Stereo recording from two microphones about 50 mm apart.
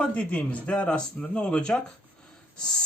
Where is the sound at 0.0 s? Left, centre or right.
Left.